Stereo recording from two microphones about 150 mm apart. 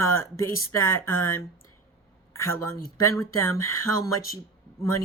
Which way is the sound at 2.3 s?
20° left (ahead or behind).